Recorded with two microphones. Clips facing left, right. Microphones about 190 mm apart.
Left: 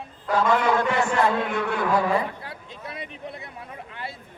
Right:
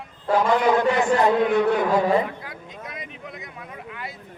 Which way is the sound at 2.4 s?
30° left (ahead or behind).